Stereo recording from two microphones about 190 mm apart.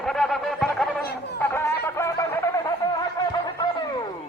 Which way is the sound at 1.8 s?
15° left (ahead or behind).